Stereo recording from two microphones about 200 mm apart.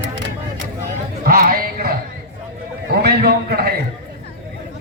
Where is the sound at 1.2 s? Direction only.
45° right (ahead or behind).